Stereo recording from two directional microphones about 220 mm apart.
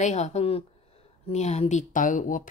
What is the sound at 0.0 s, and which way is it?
A woman's voice, 30° left (ahead or behind).